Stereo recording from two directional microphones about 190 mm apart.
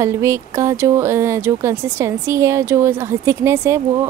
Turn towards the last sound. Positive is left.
turn(degrees=-15)  # may be behind; listen again after turning